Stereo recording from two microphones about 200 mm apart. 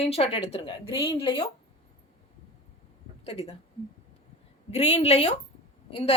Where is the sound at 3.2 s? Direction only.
30° left (ahead or behind).